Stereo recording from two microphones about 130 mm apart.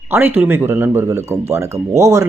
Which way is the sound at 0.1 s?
15° right (ahead or behind).